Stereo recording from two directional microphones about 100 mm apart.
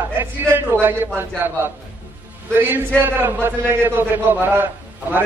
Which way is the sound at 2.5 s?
20° right (ahead or behind).